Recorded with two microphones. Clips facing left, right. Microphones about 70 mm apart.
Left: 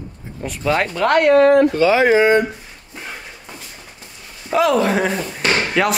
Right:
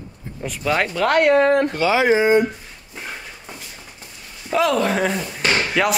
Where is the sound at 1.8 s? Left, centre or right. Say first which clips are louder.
Left 3 dB; left.